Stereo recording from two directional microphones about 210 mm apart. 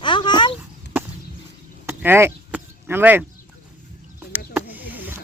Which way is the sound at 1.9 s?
10° right (ahead or behind).